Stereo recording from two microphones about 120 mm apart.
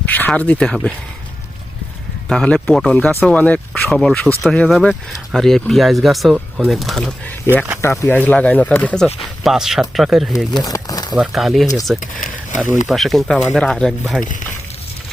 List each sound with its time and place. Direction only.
0.0 s speech: 10° left (ahead or behind)
2.3 s speech: 5° left (ahead or behind)
7.5 s speech: 20° left (ahead or behind)
9.4 s speech: 5° right (ahead or behind)
10.3 s a sound: 30° left (ahead or behind)
11.1 s speech: 5° right (ahead or behind)